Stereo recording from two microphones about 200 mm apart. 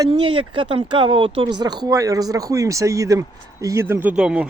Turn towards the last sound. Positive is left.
turn(degrees=-5)  # may be behind; listen again after turning